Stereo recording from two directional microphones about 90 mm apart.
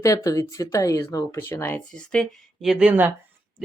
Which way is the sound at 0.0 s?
35° left (ahead or behind).